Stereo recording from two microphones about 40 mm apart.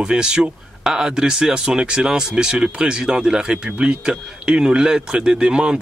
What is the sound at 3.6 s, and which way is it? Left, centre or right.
Speech, right.